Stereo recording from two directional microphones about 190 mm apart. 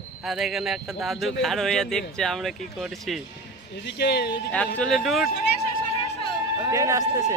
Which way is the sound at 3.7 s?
60° left (ahead or behind).